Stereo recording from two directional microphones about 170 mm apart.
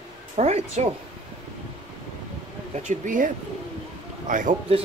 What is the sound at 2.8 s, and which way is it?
Speech, 50° right (ahead or behind).